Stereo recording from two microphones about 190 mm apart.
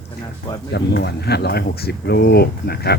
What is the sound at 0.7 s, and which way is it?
Speech, 60° left (ahead or behind).